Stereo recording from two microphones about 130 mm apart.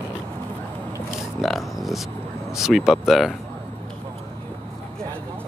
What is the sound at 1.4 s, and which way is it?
Speech, centre (ahead or behind).